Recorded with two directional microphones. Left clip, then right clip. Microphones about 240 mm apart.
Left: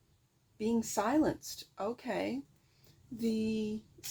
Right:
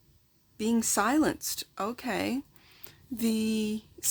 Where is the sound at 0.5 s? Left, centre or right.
Right.